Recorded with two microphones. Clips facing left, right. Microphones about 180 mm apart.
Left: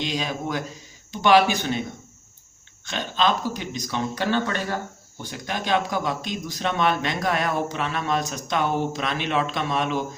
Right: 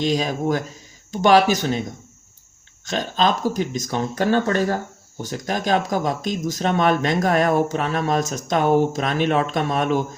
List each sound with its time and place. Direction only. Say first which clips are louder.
0.0 s speech: right 6 dB; 40° right (ahead or behind)
2.8 s speech: right 3 dB; 40° right (ahead or behind)